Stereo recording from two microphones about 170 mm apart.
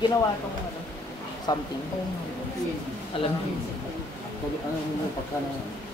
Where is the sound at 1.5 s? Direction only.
25° left (ahead or behind).